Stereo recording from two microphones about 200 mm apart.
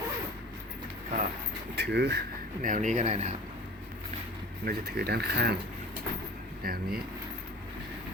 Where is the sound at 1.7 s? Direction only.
55° right (ahead or behind).